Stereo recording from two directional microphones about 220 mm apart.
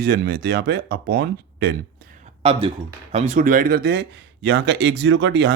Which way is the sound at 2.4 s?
25° right (ahead or behind).